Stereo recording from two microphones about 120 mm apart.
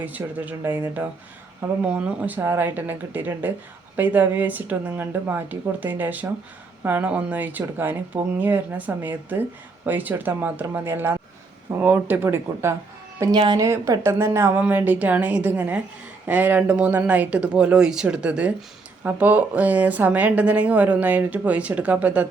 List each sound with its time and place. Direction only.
0.0 s speech: 15° right (ahead or behind)
13.3 s a woman's voice: 40° right (ahead or behind)
13.7 s a woman's voice: 25° right (ahead or behind)